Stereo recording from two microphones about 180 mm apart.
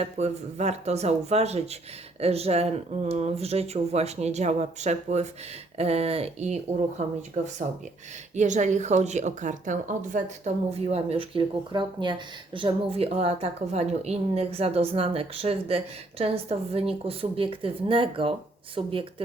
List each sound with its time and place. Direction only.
0.0 s speech: 35° right (ahead or behind)